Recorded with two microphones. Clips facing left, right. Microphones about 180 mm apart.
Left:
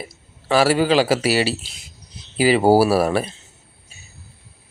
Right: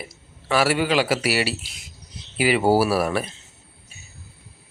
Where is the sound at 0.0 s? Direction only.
30° left (ahead or behind).